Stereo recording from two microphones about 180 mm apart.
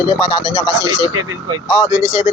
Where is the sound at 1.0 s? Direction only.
20° right (ahead or behind).